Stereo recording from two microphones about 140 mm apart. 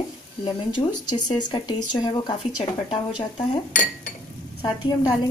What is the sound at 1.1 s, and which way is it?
Speech, 30° left (ahead or behind).